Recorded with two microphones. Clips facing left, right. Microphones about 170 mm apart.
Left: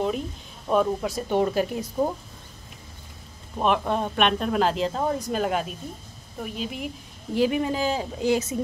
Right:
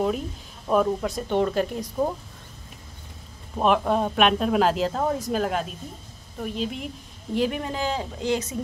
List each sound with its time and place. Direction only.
0.7 s speech: centre (ahead or behind)
3.5 s speech: centre (ahead or behind)